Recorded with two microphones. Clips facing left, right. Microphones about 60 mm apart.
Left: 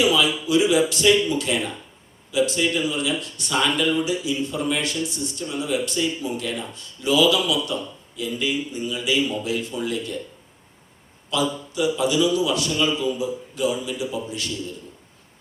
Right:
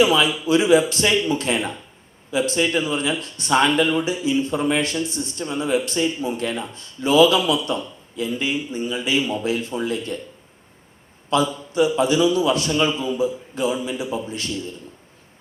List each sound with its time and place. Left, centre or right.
0.0 s speech: right
11.3 s speech: right